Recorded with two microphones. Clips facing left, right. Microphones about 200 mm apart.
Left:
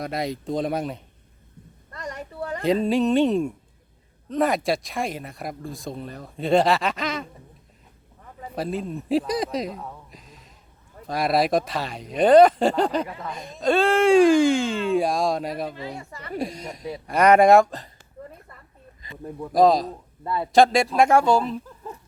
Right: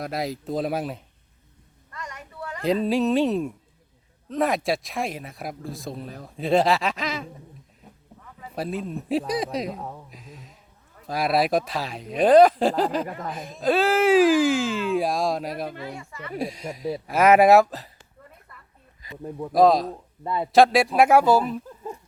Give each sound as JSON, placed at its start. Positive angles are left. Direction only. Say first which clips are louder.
{"t": 0.0, "sound": "speech", "louder": "left 1 dB", "side_deg": 0}
{"t": 1.9, "sound": "a sound", "louder": "left 5 dB", "side_deg": 35}
{"t": 2.8, "sound": "speech", "louder": "left 1 dB", "side_deg": 0}
{"t": 8.5, "sound": "speech", "louder": "left 1 dB", "side_deg": 0}
{"t": 10.1, "sound": "a sound", "louder": "right 4 dB", "side_deg": 0}
{"t": 11.0, "sound": "speech", "louder": "left 1 dB", "side_deg": 0}
{"t": 13.1, "sound": "speech", "louder": "right 2 dB", "side_deg": -45}
{"t": 13.3, "sound": "speech", "louder": "left 1 dB", "side_deg": -5}
{"t": 16.0, "sound": "speech", "louder": "even", "side_deg": 40}
{"t": 16.3, "sound": "speech", "louder": "left 1 dB", "side_deg": 0}
{"t": 19.5, "sound": "speech", "louder": "even", "side_deg": 0}
{"t": 20.2, "sound": "a man's voice", "louder": "even", "side_deg": -15}
{"t": 20.5, "sound": "speech", "louder": "even", "side_deg": -5}